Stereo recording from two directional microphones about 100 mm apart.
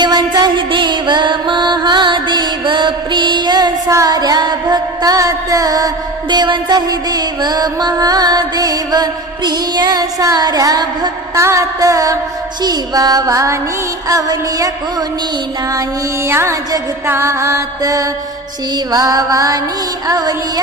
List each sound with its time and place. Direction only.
0.0 s music: 45° right (ahead or behind)
16.3 s music: 25° right (ahead or behind)